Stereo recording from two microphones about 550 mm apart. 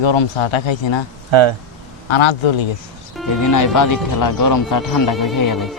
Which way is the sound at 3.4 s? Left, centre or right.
Left.